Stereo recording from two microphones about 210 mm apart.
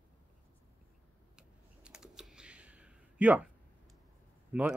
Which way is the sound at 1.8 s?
5° right (ahead or behind).